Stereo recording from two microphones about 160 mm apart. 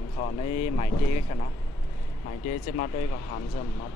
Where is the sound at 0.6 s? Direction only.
40° left (ahead or behind).